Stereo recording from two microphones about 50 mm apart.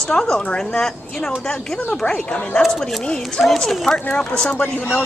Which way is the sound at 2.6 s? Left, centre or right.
Centre.